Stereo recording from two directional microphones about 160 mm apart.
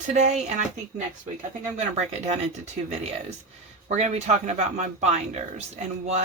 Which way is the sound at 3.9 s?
45° right (ahead or behind).